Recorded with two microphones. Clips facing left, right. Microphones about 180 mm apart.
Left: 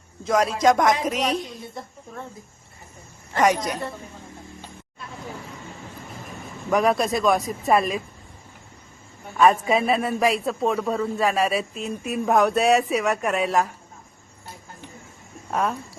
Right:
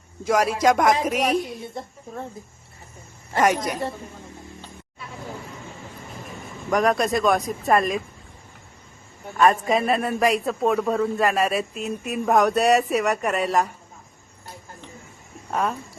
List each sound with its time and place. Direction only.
0.3 s speech: 10° right (ahead or behind)
1.1 s a woman's voice: 55° right (ahead or behind)
3.3 s a man's voice: 5° right (ahead or behind)
6.7 s a man's voice: centre (ahead or behind)
9.4 s a man's voice: centre (ahead or behind)
15.4 s speech: centre (ahead or behind)